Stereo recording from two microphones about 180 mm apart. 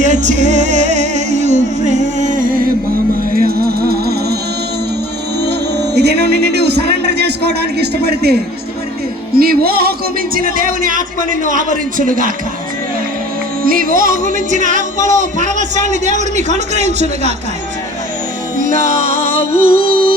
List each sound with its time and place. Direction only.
0.0 s music: 40° right (ahead or behind); by 4.4 s 60° right (ahead or behind)
5.7 s a sound: 70° right (ahead or behind)
7.8 s music: 60° right (ahead or behind)
13.7 s music: 50° right (ahead or behind)
18.9 s music: 50° right (ahead or behind)